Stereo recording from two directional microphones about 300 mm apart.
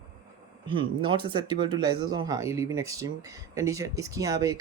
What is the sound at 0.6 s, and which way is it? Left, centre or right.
Speech, centre.